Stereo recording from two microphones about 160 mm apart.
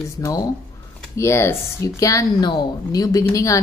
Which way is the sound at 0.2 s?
20° left (ahead or behind).